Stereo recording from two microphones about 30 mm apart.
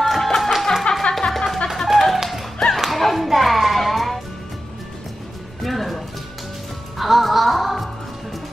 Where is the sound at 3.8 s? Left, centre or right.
Centre.